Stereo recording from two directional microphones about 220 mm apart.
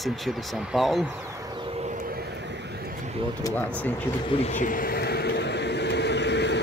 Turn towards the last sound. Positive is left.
turn(degrees=50)  # may be behind; listen again after turning